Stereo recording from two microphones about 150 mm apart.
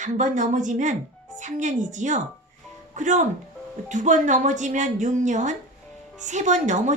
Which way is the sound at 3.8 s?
55° right (ahead or behind).